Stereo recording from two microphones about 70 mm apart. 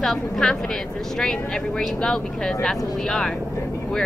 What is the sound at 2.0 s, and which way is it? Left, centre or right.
Speech, centre.